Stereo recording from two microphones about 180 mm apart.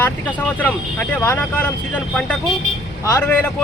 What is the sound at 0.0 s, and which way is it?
Speech, 10° left (ahead or behind).